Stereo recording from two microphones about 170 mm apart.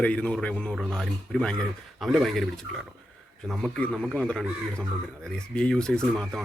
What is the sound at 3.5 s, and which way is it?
A man's voice, 5° left (ahead or behind).